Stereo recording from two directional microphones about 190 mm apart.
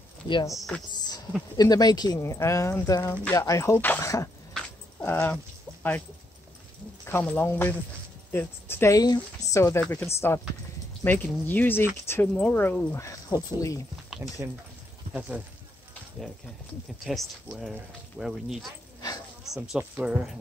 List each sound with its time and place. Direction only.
0.3 s speech: 25° left (ahead or behind)
0.6 s speech: 5° left (ahead or behind)
1.6 s speech: 20° left (ahead or behind)
4.6 s dog: 10° left (ahead or behind)
7.1 s speech: 10° left (ahead or behind)
14.1 s a sound: 5° right (ahead or behind)
15.1 s speech: 5° right (ahead or behind)
17.0 s speech: centre (ahead or behind)